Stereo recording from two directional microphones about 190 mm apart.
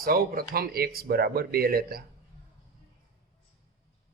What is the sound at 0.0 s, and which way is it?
A man's voice, 50° right (ahead or behind).